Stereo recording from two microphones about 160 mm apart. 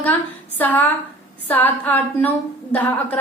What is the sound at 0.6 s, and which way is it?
A woman's voice, 10° left (ahead or behind).